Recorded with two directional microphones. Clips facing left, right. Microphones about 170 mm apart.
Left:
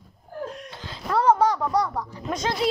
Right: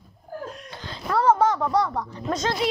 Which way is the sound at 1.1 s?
15° left (ahead or behind).